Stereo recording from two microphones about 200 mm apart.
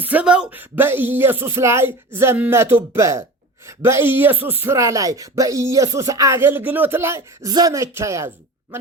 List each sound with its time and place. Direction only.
0.0 s speech: 5° right (ahead or behind)